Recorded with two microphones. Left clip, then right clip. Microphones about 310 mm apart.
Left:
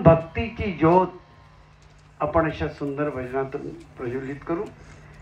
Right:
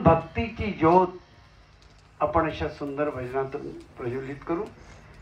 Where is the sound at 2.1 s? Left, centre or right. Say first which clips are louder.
Left 2 dB; centre.